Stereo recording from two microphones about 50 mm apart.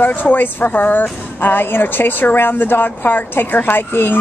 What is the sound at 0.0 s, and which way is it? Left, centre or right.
Speech, left.